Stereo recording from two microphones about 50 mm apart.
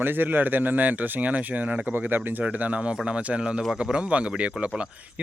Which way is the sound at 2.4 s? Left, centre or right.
Right.